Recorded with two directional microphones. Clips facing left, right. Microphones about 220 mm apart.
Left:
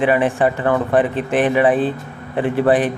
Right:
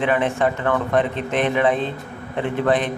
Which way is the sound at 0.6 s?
35° left (ahead or behind).